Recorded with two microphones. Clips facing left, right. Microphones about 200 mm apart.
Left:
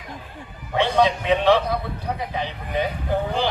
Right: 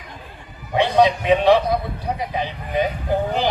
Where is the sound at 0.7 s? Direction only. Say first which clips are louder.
Right 3 dB; 15° right (ahead or behind).